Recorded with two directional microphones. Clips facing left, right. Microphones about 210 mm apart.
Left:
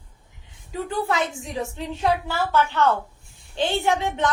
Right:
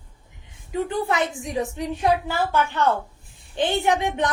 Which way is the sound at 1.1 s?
15° right (ahead or behind).